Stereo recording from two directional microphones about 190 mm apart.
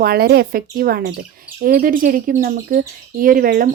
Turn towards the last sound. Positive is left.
turn(degrees=-50)  # may be behind; listen again after turning